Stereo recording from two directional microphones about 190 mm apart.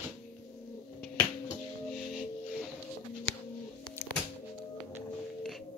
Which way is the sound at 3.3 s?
80° left.